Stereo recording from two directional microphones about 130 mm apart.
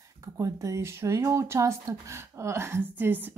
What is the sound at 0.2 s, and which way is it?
Speech, 25° right (ahead or behind).